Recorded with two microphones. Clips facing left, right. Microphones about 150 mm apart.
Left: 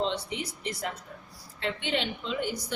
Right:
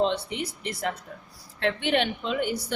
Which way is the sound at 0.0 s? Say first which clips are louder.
Right 5 dB; 60° right (ahead or behind).